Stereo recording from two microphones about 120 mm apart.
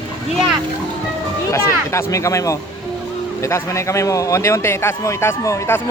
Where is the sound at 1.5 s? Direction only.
25° left (ahead or behind).